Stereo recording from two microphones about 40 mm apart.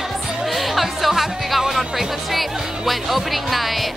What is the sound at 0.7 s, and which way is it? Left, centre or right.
Music, centre.